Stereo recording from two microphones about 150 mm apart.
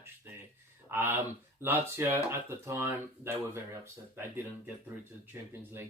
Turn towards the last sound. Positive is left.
turn(degrees=-15)  # may be behind; listen again after turning